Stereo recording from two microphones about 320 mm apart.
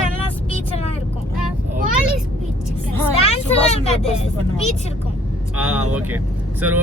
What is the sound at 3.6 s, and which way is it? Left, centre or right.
Speech, left.